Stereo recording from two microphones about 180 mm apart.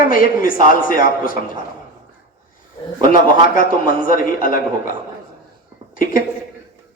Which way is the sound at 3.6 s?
50° left (ahead or behind).